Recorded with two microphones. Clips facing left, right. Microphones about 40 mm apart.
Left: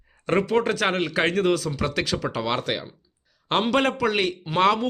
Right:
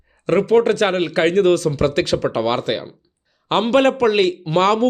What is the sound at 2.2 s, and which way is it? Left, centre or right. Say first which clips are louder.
Speech: right 8 dB; centre.